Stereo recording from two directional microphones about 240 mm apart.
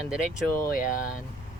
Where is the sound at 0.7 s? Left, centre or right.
Left.